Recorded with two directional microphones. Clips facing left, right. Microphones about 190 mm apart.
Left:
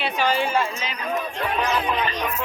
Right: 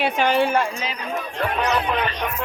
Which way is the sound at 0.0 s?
60° right (ahead or behind).